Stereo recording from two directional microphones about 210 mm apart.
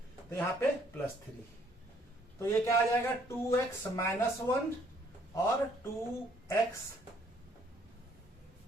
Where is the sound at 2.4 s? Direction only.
15° left (ahead or behind).